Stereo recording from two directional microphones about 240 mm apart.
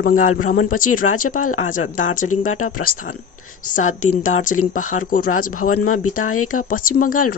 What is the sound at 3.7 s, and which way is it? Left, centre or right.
Speech, left.